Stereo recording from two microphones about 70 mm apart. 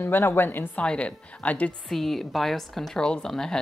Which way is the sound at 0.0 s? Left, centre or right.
Left.